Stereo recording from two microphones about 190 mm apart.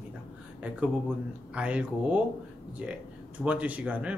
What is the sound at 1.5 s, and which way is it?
Speech, 5° right (ahead or behind).